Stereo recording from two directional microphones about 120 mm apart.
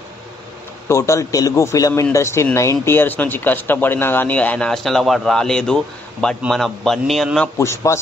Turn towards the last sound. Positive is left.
turn(degrees=25)  # may be behind; listen again after turning